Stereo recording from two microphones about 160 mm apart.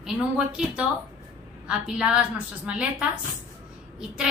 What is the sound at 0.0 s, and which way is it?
A woman's voice, 5° right (ahead or behind).